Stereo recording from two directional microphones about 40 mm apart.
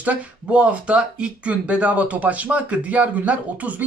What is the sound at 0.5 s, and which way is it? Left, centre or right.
Speech, right.